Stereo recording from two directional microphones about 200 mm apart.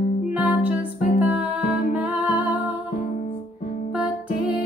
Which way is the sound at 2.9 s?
40° left (ahead or behind).